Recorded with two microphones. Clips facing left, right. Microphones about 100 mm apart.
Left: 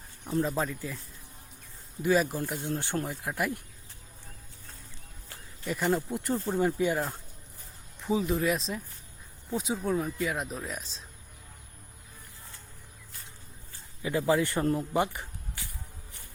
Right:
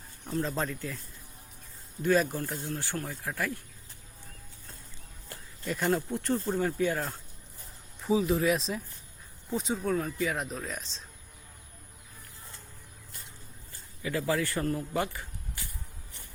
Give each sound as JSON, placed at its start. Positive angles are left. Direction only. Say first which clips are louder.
{"t": 0.4, "sound": "speech", "louder": "left 2 dB", "side_deg": 5}
{"t": 2.5, "sound": "a man's voice", "louder": "left 3 dB", "side_deg": 20}
{"t": 5.6, "sound": "speech", "louder": "even", "side_deg": 0}
{"t": 8.0, "sound": "speech", "louder": "right 2 dB", "side_deg": 0}
{"t": 14.0, "sound": "a man's voice", "louder": "left 3 dB", "side_deg": 20}